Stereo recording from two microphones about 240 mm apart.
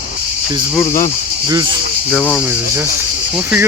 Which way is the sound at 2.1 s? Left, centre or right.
Centre.